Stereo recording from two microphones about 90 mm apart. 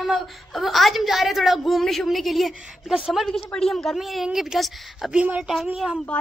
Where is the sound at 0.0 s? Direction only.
Centre (ahead or behind).